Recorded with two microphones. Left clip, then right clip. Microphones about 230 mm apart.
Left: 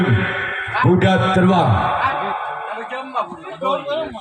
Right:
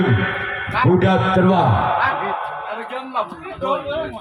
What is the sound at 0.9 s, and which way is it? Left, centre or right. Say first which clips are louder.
Speech: even; left.